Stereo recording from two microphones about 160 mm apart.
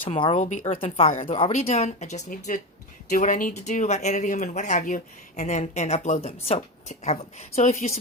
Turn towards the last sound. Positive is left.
turn(degrees=45)  # may be behind; listen again after turning